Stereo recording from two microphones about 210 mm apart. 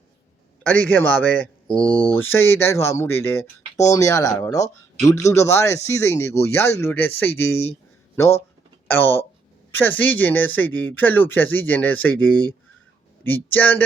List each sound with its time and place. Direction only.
0.7 s speech: 10° left (ahead or behind)
1.8 s speech: 25° left (ahead or behind)
2.0 s speech: 10° left (ahead or behind)